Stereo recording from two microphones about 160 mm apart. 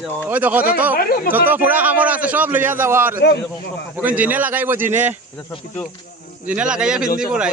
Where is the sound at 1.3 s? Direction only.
10° right (ahead or behind).